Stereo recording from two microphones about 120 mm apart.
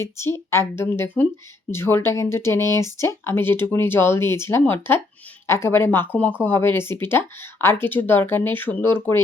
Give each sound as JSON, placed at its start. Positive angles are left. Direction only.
{"t": 0.0, "sound": "speech", "side_deg": 20}